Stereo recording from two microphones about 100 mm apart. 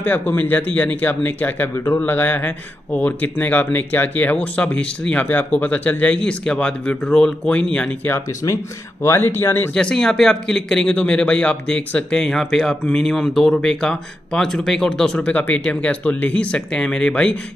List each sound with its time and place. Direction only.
0.0 s speech: 20° left (ahead or behind)
8.4 s speech: 35° left (ahead or behind)
9.0 s speech: 25° left (ahead or behind)
9.8 s speech: 5° left (ahead or behind)